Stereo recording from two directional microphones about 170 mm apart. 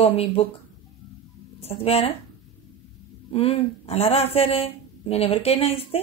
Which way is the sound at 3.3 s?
35° left (ahead or behind).